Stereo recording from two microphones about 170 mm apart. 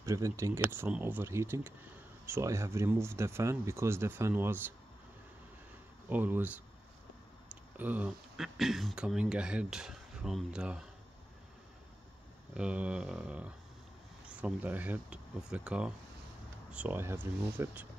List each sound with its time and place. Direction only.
0.0 s speech: 15° right (ahead or behind)
6.0 s speech: 10° right (ahead or behind)
7.7 s speech: 10° right (ahead or behind)
12.5 s speech: 5° right (ahead or behind)